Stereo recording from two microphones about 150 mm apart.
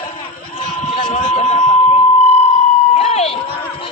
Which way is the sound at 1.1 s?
45° left (ahead or behind).